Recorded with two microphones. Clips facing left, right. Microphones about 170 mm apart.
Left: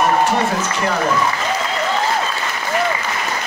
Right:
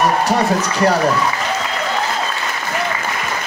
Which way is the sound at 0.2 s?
40° right (ahead or behind).